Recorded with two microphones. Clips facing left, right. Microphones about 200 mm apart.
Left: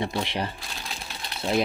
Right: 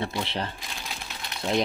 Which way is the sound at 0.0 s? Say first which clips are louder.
Left 2 dB; 15° left (ahead or behind).